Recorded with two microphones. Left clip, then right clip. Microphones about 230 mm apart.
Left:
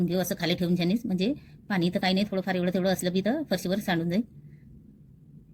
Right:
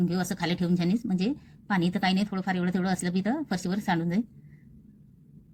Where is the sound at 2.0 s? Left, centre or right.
Right.